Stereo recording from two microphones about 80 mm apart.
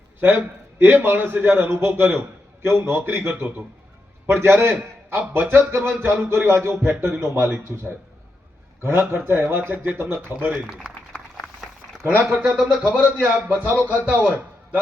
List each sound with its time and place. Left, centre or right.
0.2 s a man's voice: right
10.7 s a sound: centre
12.2 s speech: centre
12.5 s speech: centre
12.8 s a man's voice: centre